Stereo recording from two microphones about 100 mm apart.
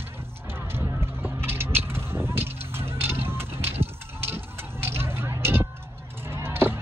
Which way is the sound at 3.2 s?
25° right (ahead or behind).